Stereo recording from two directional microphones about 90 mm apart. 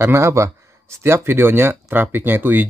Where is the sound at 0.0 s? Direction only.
30° right (ahead or behind).